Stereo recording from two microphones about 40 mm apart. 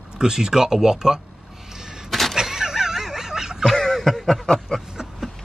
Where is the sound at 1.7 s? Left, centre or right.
Centre.